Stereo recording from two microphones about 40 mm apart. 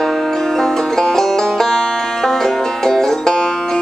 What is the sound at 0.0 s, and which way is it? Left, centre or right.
Music, centre.